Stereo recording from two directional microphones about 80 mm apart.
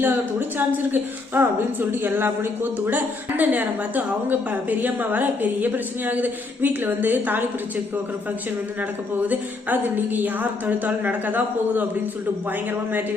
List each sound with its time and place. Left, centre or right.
0.0 s a woman's voice: right
9.2 s a woman's voice: right